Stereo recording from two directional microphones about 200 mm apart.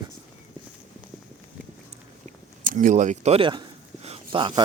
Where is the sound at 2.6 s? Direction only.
40° right (ahead or behind); by 4.6 s 25° right (ahead or behind).